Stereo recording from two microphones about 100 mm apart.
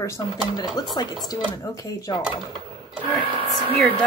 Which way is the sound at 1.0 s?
45° left (ahead or behind).